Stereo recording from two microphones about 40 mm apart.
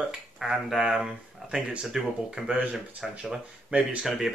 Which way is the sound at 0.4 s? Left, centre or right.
Centre.